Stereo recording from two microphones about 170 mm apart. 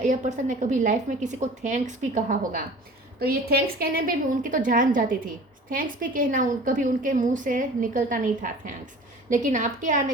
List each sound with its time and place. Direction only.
0.0 s a woman's voice: 45° right (ahead or behind)